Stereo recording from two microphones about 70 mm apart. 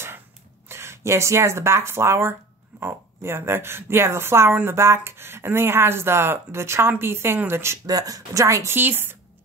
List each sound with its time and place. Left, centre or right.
0.7 s speech: right
7.8 s speech: right
8.7 s speech: right